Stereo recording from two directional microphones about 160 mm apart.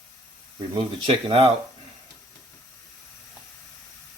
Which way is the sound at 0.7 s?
30° right (ahead or behind).